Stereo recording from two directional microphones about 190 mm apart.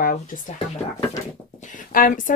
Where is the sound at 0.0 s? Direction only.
45° left (ahead or behind).